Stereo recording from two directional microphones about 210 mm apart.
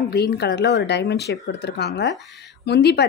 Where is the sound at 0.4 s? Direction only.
50° left (ahead or behind).